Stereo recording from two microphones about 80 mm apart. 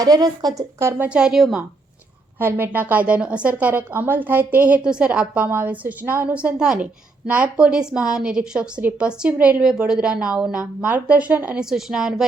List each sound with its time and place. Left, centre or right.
0.0 s speech: right
0.8 s speech: right
1.1 s a woman's voice: centre
2.4 s a woman's voice: right
11.6 s a woman's voice: centre